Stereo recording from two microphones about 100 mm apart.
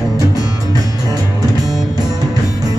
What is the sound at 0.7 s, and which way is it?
Music, 35° right (ahead or behind).